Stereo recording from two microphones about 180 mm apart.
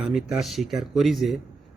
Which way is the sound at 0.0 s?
Centre (ahead or behind).